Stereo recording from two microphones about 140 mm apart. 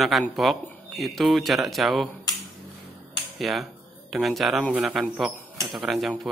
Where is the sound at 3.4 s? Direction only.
Centre (ahead or behind).